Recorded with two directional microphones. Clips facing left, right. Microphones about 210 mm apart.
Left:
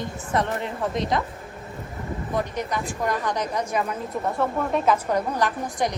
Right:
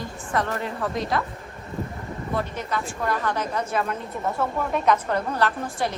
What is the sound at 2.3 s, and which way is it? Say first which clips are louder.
Speech: left 1 dB; 15° left (ahead or behind).